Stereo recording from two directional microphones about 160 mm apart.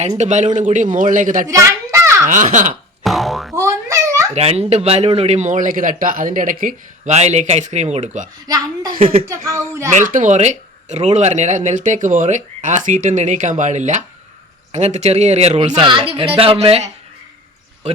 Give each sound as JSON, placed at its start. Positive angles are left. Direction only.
{"t": 0.2, "sound": "speech", "side_deg": -45}
{"t": 1.5, "sound": "children playing", "side_deg": -20}
{"t": 2.2, "sound": "speech", "side_deg": -50}
{"t": 3.0, "sound": "boing", "side_deg": 0}
{"t": 3.5, "sound": "babbling", "side_deg": -15}
{"t": 4.4, "sound": "speech", "side_deg": -40}
{"t": 8.4, "sound": "a woman's voice", "side_deg": -25}
{"t": 9.2, "sound": "a woman's voice", "side_deg": -20}
{"t": 9.9, "sound": "speech", "side_deg": -50}